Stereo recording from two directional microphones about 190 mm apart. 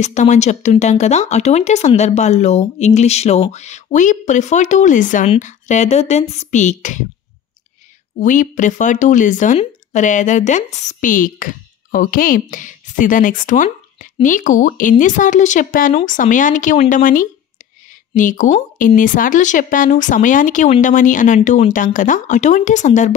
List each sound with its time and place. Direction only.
0.0 s speech: 40° left (ahead or behind)
8.2 s speech: 40° left (ahead or behind)